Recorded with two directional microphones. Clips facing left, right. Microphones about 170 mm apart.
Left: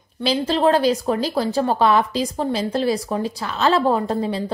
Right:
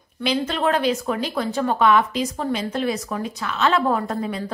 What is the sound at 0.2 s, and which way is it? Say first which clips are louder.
A woman's voice: left 4 dB; 35° left (ahead or behind).